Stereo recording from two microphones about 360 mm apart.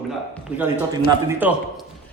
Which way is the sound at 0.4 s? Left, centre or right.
Centre.